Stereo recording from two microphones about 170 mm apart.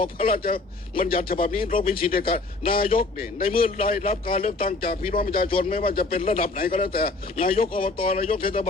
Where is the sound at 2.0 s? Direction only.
60° left (ahead or behind).